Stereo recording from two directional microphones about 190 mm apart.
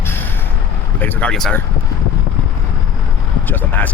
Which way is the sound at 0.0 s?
10° left (ahead or behind).